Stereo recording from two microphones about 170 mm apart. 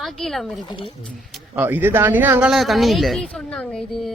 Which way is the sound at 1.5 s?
10° right (ahead or behind).